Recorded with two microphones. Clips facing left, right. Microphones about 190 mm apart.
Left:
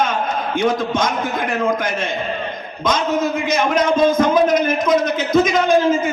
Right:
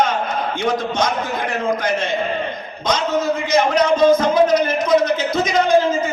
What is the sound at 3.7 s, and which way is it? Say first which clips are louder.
A man's voice: right 1 dB; 50° left (ahead or behind).